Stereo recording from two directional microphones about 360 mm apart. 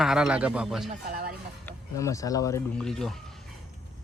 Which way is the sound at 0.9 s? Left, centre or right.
Right.